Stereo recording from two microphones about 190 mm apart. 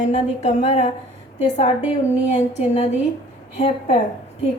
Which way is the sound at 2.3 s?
35° left (ahead or behind).